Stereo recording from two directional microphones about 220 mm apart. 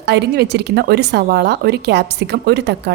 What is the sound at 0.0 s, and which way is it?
Speech, 50° right (ahead or behind).